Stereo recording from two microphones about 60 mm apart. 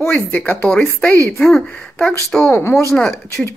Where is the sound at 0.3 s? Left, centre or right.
Left.